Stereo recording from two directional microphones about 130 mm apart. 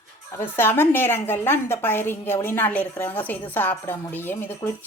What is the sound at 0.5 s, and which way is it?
A woman's voice, 15° left (ahead or behind).